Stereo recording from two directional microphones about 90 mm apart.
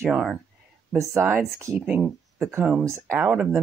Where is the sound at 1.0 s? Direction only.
30° right (ahead or behind).